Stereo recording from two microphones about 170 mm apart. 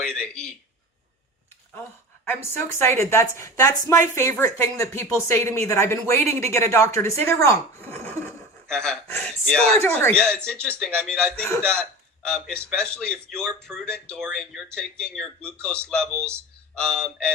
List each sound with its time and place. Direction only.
0.0 s a man's voice: 5° left (ahead or behind)
2.2 s a man's voice: 15° left (ahead or behind)